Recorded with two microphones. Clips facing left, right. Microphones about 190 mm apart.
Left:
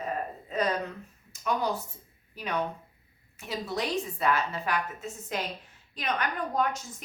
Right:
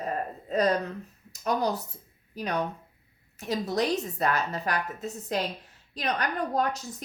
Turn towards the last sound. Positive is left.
turn(degrees=-35)  # may be behind; listen again after turning